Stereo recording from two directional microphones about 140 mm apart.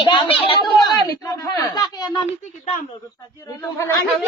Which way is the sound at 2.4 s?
60° left (ahead or behind).